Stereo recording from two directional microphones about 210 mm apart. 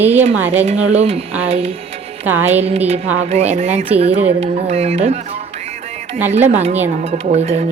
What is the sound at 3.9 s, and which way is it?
Speech, 30° right (ahead or behind).